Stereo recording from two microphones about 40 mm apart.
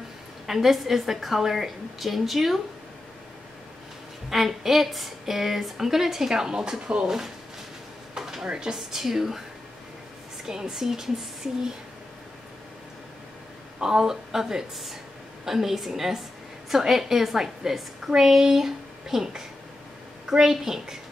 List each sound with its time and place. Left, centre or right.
0.5 s a woman's voice: centre
4.3 s a woman's voice: centre; by 7.1 s right
8.1 s a sound: centre
8.5 s speech: right
8.7 s a woman's voice: centre
10.4 s a woman's voice: centre
13.7 s a woman's voice: centre